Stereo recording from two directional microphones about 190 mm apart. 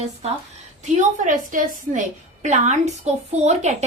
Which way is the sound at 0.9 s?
40° right (ahead or behind).